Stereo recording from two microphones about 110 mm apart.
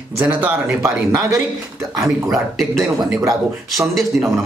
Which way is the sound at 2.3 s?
Centre (ahead or behind).